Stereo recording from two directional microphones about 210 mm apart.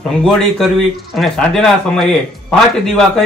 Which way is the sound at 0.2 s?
Centre (ahead or behind).